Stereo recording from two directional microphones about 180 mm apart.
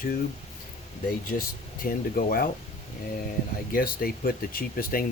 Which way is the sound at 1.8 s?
50° left (ahead or behind).